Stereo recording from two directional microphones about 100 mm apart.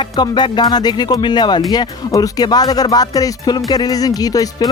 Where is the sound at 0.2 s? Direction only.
45° left (ahead or behind).